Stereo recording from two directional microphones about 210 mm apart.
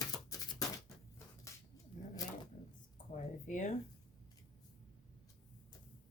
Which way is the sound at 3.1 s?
35° left (ahead or behind).